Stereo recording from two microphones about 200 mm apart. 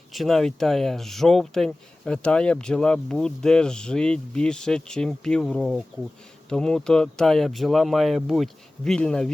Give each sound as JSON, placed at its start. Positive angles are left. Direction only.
{"t": 0.1, "sound": "speech", "side_deg": 0}